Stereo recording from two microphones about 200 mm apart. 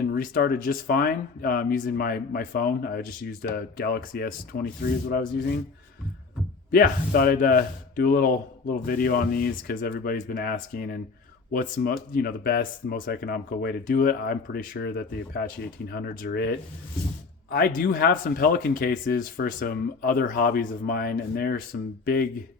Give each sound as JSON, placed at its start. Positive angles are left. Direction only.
{"t": 0.0, "sound": "speech", "side_deg": 45}
{"t": 6.7, "sound": "speech", "side_deg": 45}